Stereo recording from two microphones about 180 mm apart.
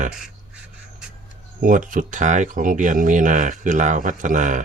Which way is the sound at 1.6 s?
45° right (ahead or behind).